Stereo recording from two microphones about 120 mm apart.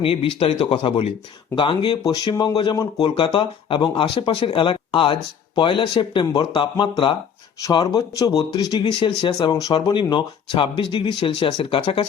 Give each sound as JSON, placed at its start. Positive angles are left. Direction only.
{"t": 0.0, "sound": "speech", "side_deg": 50}
{"t": 8.8, "sound": "speech", "side_deg": 45}